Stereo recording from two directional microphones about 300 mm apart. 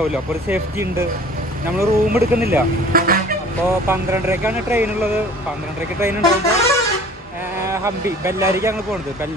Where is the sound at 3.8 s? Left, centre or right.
Centre.